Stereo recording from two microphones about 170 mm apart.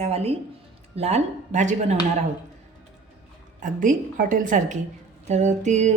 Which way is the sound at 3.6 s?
50° right (ahead or behind).